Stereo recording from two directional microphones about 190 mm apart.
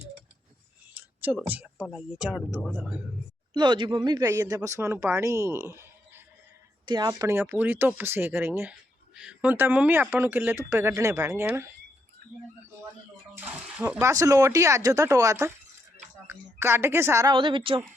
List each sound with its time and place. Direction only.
0.9 s speech: 10° right (ahead or behind)
3.5 s speech: 25° right (ahead or behind)
13.3 s speech: 10° right (ahead or behind); by 17.8 s 25° right (ahead or behind)